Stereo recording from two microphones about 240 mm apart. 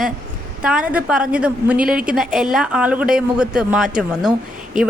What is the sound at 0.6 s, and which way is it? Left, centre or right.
Speech, centre.